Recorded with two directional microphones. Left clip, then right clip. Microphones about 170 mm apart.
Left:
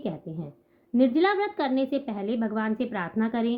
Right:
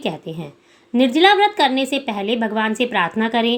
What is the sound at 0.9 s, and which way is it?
A woman's voice, 10° right (ahead or behind).